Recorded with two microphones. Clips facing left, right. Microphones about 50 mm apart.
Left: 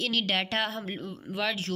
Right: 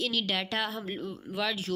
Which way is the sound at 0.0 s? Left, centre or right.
Left.